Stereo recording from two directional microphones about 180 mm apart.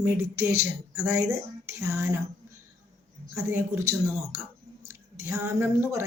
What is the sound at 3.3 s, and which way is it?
Speech, 10° right (ahead or behind).